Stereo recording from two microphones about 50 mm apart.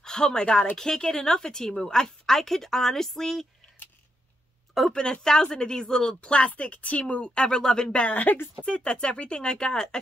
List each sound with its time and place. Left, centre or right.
0.0 s speech: centre
4.9 s speech: centre